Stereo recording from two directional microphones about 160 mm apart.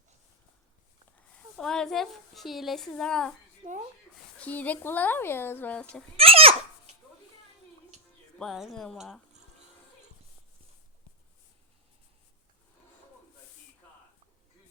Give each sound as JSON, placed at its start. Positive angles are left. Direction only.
{"t": 1.5, "sound": "a woman's voice", "side_deg": 5}
{"t": 3.6, "sound": "speech", "side_deg": -55}
{"t": 4.4, "sound": "speech", "side_deg": 10}
{"t": 6.1, "sound": "a sound", "side_deg": -35}
{"t": 8.4, "sound": "a woman's voice", "side_deg": 0}